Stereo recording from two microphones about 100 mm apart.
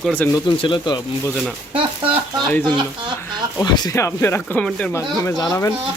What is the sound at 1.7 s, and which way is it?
Speech, 60° right (ahead or behind).